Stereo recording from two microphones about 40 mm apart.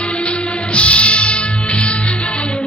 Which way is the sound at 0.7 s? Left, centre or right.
Left.